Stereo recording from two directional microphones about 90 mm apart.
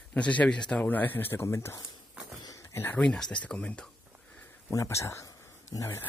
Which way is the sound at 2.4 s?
35° left (ahead or behind).